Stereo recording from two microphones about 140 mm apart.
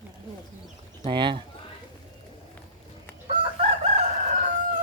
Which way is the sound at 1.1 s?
35° right (ahead or behind).